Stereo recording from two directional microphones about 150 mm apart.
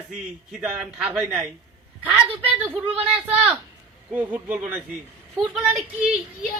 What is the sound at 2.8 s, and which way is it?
Speech, 40° right (ahead or behind).